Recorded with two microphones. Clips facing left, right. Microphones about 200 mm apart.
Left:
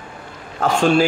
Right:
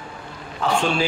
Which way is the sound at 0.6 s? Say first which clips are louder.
Left 6 dB; 45° left (ahead or behind).